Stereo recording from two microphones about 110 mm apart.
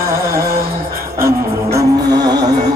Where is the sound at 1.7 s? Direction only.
40° right (ahead or behind).